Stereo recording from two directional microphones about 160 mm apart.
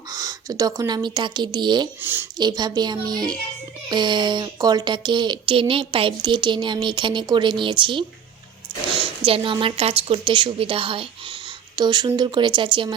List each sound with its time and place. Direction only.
0.1 s speech: 20° right (ahead or behind)
2.0 s speech: 15° right (ahead or behind)
2.4 s speech: 25° right (ahead or behind)